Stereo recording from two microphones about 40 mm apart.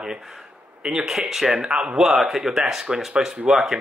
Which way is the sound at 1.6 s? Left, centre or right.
Right.